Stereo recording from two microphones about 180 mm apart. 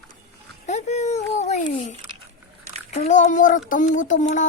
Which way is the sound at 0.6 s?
40° left (ahead or behind).